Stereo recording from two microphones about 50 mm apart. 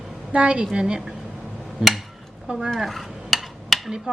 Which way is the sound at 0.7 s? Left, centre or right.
Centre.